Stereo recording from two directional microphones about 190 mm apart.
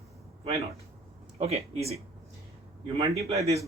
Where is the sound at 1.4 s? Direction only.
35° right (ahead or behind).